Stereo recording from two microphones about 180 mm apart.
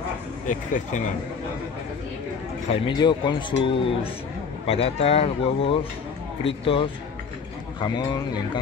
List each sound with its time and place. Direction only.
0.5 s speech: 45° left (ahead or behind)
2.7 s a man's voice: 25° left (ahead or behind)